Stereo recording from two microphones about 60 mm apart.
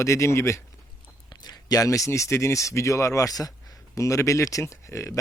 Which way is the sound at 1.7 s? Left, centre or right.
Left.